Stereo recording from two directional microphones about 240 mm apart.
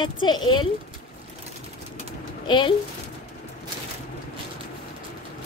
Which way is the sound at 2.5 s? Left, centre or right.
Centre.